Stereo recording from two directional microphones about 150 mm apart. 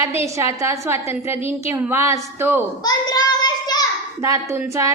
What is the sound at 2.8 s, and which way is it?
Child singing, 25° left (ahead or behind).